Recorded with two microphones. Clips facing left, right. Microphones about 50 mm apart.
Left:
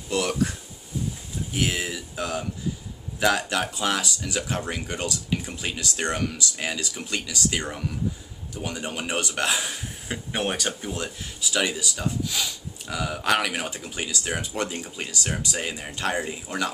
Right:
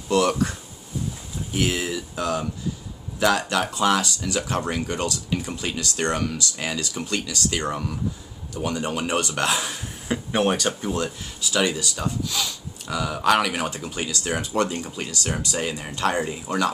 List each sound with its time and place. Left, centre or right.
0.1 s speech: centre
8.6 s a man's voice: centre